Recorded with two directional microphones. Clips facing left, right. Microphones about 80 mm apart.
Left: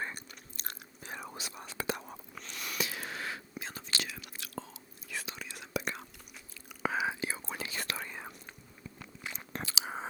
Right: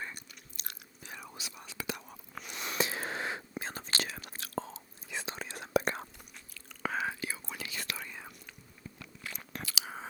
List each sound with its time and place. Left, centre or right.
0.0 s chewing: left
2.4 s a sound: right
3.5 s whispering: right
5.0 s whispering: right
5.3 s whispering: right
6.8 s whispering: centre
7.1 s whispering: left
9.2 s biting: left